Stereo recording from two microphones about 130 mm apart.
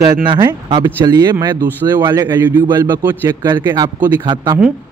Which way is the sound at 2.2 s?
15° right (ahead or behind).